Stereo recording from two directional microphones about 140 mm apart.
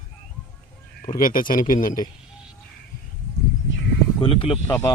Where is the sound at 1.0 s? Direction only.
85° left.